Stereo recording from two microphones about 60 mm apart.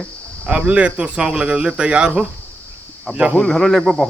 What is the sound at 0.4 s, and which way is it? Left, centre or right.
Speech, right.